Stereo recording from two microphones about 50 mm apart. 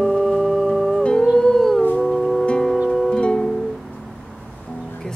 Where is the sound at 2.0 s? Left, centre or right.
Centre.